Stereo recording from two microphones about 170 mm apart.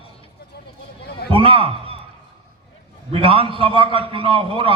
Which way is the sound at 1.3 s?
30° right (ahead or behind).